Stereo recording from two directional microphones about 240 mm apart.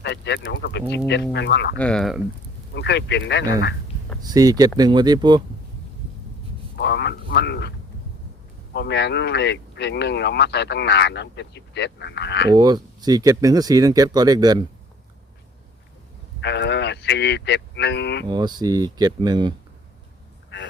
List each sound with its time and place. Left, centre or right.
0.0 s speech: left
1.7 s speech: centre
2.7 s speech: left
4.2 s speech: centre
6.7 s a sound: left
8.7 s speech: left
12.5 s speech: centre
16.4 s cattle: left
18.3 s speech: centre